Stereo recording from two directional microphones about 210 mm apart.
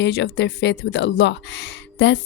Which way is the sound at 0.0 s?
55° left (ahead or behind).